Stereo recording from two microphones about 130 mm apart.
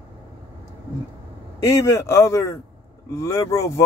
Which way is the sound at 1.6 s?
25° left (ahead or behind).